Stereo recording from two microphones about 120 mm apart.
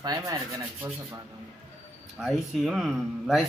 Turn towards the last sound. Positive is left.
turn(degrees=0)  # may be behind; listen again after turning